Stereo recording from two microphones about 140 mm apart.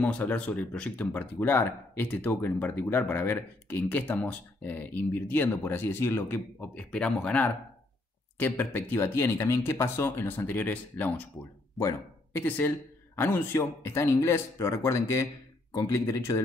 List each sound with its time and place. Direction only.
0.0 s speech: 10° left (ahead or behind)